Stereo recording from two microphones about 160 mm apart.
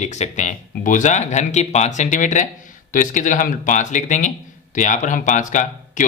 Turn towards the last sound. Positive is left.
turn(degrees=50)  # may be behind; listen again after turning